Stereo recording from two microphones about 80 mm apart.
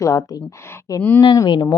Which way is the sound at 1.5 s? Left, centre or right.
Left.